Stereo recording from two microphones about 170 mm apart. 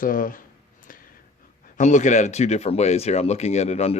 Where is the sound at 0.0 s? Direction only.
55° left (ahead or behind).